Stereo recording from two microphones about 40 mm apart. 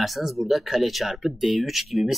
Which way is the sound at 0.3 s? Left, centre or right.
Centre.